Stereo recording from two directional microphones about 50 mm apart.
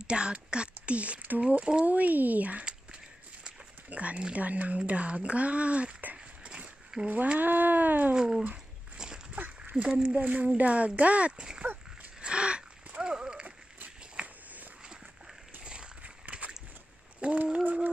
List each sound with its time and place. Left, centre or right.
0.0 s speech: right
3.9 s speech: right
6.9 s speech: centre
7.3 s speech: right
8.1 s speech: centre
8.9 s a sound: centre
9.3 s a sound: right
9.8 s speech: centre
10.2 s speech: right
12.2 s gasp: right
13.8 s walk: right
15.6 s biting: centre
17.2 s a sound: right